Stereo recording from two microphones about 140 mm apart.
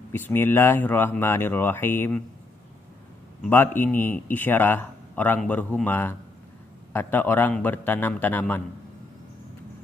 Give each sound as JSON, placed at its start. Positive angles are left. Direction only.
{"t": 0.1, "sound": "speech", "side_deg": 15}
{"t": 3.4, "sound": "speech", "side_deg": 15}